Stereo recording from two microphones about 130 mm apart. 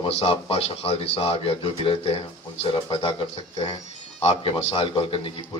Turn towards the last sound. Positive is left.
turn(degrees=45)  # may be behind; listen again after turning